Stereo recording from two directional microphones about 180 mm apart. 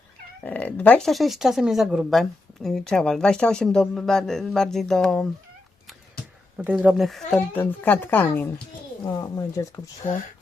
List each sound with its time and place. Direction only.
0.4 s speech: 10° left (ahead or behind)
6.6 s speech: 5° right (ahead or behind); by 9.9 s 15° left (ahead or behind)